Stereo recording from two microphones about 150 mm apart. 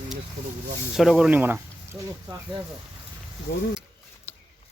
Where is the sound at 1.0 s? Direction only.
5° right (ahead or behind); by 2.1 s 20° right (ahead or behind).